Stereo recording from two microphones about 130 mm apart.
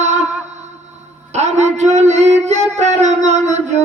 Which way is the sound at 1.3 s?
60° right (ahead or behind).